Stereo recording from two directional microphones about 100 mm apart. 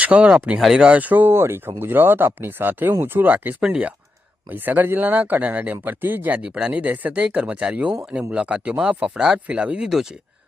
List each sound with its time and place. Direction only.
0.0 s speech: 10° right (ahead or behind)